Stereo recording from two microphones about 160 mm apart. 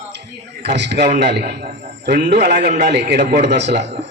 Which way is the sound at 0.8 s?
90° right.